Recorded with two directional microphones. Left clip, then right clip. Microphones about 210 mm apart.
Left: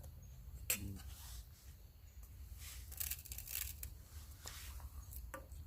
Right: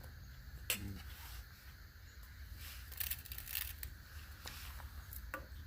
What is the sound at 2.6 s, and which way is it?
Scissors, 10° right (ahead or behind).